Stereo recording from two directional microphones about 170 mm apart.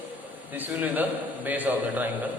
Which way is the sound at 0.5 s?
10° right (ahead or behind).